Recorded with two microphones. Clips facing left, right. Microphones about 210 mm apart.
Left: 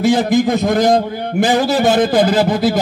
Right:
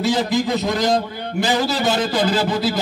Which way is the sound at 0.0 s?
50° left (ahead or behind).